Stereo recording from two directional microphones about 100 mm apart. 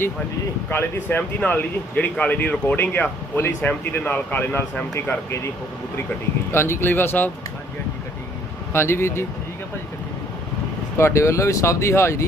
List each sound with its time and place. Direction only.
0.7 s speech: 20° left (ahead or behind)
6.5 s speech: 25° left (ahead or behind)
8.7 s speech: 25° left (ahead or behind)
10.9 s speech: 30° left (ahead or behind)